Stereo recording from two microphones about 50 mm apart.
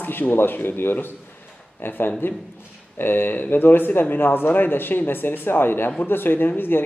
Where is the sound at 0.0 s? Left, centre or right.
Left.